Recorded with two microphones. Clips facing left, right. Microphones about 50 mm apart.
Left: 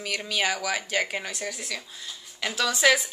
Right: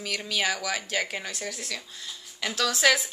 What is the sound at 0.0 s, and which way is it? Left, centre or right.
Speech, centre.